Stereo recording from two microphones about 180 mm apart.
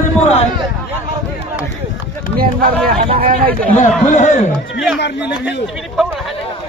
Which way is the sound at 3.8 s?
45° left (ahead or behind).